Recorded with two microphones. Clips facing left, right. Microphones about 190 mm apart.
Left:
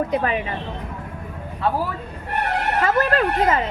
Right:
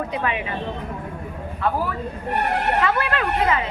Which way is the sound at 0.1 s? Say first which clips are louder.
Left 4 dB; 40° left (ahead or behind).